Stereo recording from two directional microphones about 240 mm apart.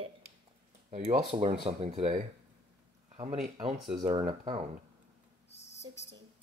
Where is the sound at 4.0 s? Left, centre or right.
Right.